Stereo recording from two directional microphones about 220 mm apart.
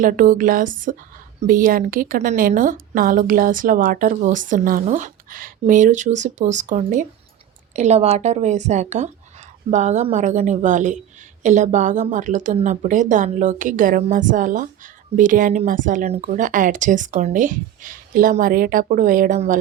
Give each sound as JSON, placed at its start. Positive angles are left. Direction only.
{"t": 0.0, "sound": "speech", "side_deg": -35}